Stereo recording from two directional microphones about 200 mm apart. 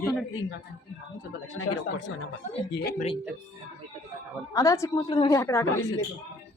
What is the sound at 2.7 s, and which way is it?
Speech, 50° left (ahead or behind).